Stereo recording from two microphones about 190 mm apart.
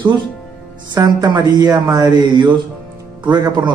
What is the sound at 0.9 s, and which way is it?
A man's voice, 20° right (ahead or behind).